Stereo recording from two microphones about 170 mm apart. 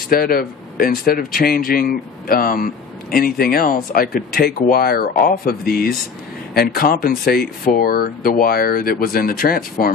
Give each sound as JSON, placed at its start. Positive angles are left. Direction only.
{"t": 0.1, "sound": "a man's voice", "side_deg": 60}